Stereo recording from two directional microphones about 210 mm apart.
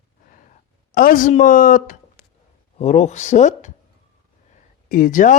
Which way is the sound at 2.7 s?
30° left (ahead or behind).